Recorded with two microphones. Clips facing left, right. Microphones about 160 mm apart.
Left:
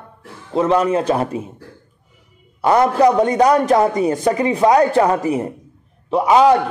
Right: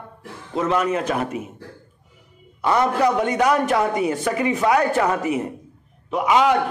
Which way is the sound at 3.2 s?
35° left (ahead or behind).